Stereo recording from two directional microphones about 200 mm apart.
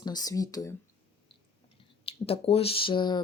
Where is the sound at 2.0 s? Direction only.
30° left (ahead or behind).